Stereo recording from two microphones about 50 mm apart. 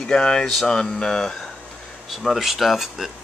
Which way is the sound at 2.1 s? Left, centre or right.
Centre.